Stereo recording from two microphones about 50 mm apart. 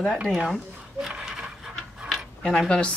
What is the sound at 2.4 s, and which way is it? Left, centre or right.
Speech, centre.